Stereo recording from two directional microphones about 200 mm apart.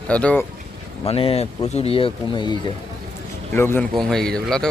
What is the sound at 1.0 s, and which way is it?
Speech, 30° left (ahead or behind).